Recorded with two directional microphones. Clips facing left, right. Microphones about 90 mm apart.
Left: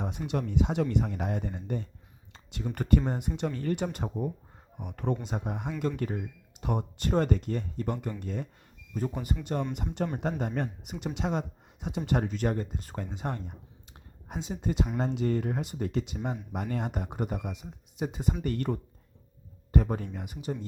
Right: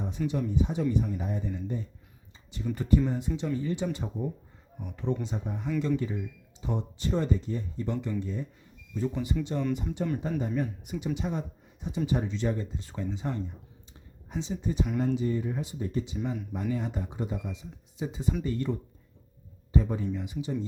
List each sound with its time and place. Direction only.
0.3 s speech: 70° left (ahead or behind)
2.3 s a sound: 75° left (ahead or behind)
2.7 s speech: 65° left (ahead or behind)
6.0 s speech: 60° left (ahead or behind)
8.9 s speech: 50° left (ahead or behind)
13.9 s a sound: 55° left (ahead or behind)
14.9 s speech: 85° left; by 20.7 s 55° left (ahead or behind)